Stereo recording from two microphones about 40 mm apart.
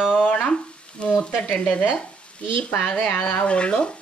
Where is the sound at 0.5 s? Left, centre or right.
Left.